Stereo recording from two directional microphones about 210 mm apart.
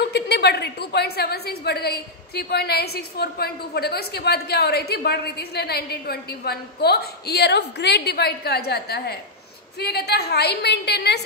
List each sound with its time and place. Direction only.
0.0 s a woman's voice: 50° left (ahead or behind)